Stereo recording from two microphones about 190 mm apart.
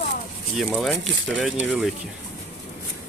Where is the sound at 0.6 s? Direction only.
Centre (ahead or behind).